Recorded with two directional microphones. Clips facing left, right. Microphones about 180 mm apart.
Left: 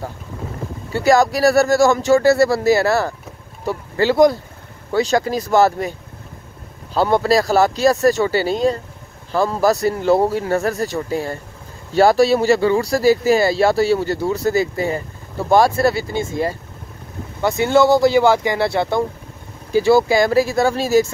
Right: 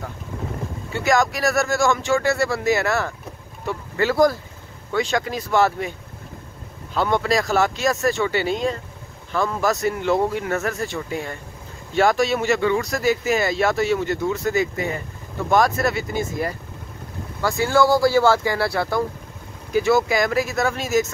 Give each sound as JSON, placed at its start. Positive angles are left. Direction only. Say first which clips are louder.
{"t": 0.9, "sound": "speech", "louder": "left 6 dB", "side_deg": 35}
{"t": 4.9, "sound": "speech", "louder": "left 5 dB", "side_deg": 35}